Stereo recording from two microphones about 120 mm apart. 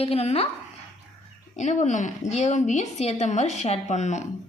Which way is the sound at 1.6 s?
85° left.